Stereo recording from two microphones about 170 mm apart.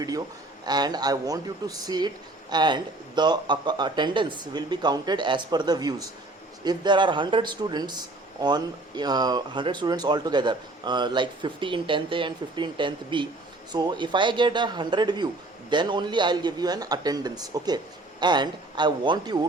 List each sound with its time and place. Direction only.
0.6 s a man's voice: 25° right (ahead or behind)